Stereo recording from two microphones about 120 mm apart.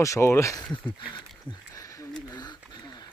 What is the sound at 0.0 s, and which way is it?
Speech, 25° left (ahead or behind).